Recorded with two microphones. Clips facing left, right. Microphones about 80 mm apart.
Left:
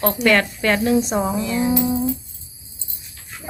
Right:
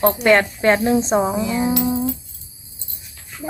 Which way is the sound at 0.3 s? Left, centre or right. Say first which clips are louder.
Right 2 dB; right.